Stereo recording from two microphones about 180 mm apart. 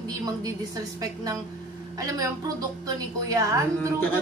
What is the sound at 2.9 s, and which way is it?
A woman's voice, 20° right (ahead or behind).